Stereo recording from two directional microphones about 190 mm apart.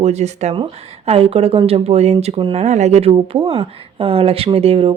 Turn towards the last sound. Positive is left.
turn(degrees=-30)  # may be behind; listen again after turning